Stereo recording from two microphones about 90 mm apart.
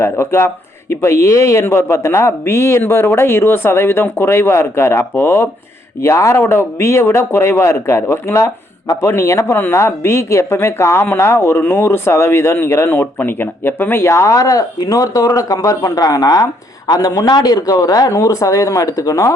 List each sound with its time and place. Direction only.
0.0 s speech: 30° left (ahead or behind)